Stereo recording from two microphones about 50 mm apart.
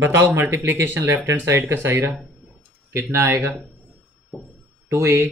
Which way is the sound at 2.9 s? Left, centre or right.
Right.